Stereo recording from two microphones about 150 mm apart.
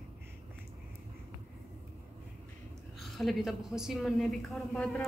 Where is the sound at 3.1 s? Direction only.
Centre (ahead or behind).